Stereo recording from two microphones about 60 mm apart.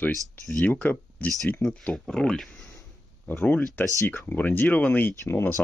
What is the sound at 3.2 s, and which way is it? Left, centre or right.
Speech, left.